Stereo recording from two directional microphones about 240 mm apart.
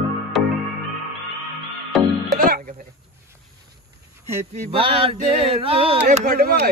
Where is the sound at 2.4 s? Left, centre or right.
Right.